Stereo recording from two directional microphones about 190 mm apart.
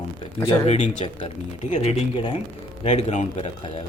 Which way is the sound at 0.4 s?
35° left (ahead or behind).